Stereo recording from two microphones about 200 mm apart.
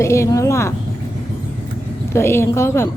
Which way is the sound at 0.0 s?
15° left (ahead or behind).